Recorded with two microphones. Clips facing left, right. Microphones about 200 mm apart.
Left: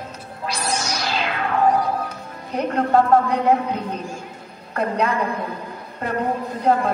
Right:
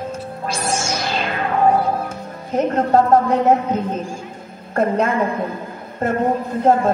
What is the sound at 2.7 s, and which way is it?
A woman's voice, 45° right (ahead or behind).